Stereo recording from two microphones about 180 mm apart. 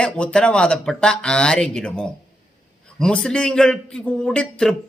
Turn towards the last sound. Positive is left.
turn(degrees=5)  # may be behind; listen again after turning